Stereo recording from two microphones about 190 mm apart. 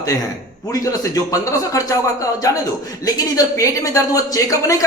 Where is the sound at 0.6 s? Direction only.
20° left (ahead or behind).